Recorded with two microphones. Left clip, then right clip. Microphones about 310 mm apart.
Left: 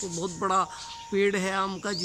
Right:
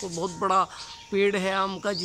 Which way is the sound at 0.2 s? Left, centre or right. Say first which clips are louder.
Right 3 dB; centre.